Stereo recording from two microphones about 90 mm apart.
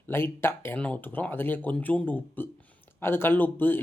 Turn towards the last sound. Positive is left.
turn(degrees=20)  # may be behind; listen again after turning